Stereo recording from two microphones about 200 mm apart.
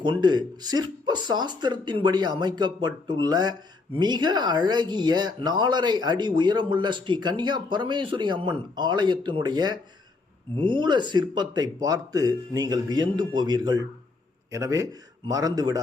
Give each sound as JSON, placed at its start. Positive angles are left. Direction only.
{"t": 0.0, "sound": "a man's voice", "side_deg": -20}